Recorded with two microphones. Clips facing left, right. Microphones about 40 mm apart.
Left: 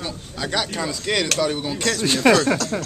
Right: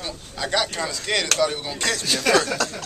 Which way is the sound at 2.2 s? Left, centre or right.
Left.